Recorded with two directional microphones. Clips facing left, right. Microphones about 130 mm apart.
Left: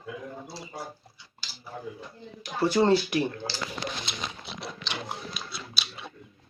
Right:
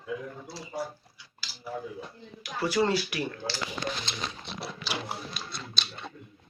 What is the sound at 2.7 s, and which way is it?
Speech, 25° left (ahead or behind).